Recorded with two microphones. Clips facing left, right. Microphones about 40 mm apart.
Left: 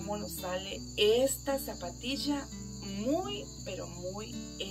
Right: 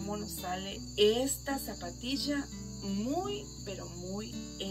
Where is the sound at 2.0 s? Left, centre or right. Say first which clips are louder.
Even; centre.